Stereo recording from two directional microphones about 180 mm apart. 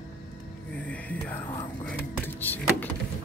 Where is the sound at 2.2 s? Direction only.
10° left (ahead or behind).